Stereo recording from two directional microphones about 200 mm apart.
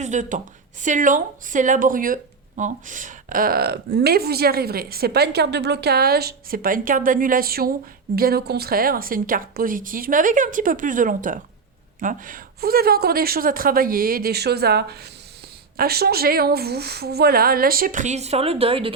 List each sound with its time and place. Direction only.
0.0 s a woman's voice: 40° right (ahead or behind)